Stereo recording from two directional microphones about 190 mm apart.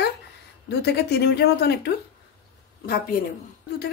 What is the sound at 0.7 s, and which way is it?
Speech, 60° left (ahead or behind).